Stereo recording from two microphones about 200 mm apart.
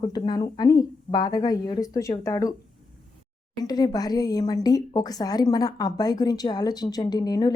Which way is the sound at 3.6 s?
20° left (ahead or behind).